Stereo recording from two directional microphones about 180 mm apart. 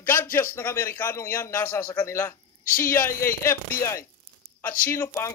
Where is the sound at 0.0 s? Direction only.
15° left (ahead or behind).